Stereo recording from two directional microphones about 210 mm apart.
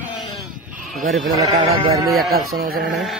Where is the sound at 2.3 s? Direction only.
45° right (ahead or behind).